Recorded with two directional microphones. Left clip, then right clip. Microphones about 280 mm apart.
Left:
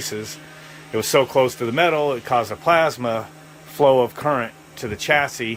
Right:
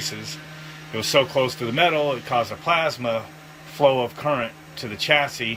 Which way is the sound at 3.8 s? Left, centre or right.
Left.